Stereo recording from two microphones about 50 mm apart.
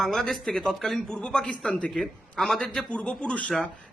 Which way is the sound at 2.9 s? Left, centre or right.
Left.